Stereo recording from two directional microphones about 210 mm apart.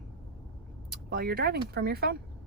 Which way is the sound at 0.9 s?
45° right (ahead or behind).